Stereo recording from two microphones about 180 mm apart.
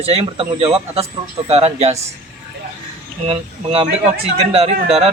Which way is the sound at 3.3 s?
30° right (ahead or behind).